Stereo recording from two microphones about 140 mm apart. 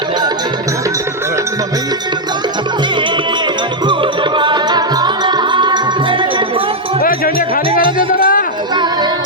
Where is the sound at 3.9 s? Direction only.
35° right (ahead or behind).